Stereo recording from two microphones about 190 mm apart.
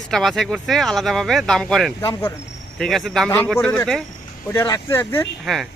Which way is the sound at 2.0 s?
15° left (ahead or behind).